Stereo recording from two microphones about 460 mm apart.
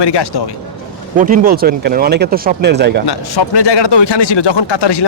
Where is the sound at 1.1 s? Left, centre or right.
Centre.